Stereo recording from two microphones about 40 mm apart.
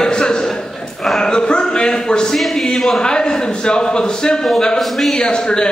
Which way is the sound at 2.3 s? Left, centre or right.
Centre.